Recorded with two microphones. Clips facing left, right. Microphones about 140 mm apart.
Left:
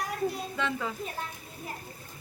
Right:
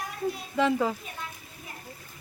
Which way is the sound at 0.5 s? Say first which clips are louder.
Right 7 dB; 30° right (ahead or behind).